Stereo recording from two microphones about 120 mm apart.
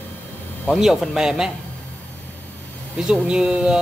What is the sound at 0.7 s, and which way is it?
Speech, centre (ahead or behind).